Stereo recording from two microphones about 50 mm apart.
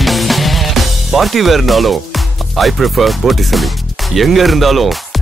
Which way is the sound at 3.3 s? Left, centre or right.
Centre.